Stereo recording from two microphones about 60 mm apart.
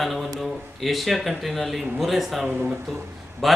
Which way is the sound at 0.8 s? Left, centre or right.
Centre.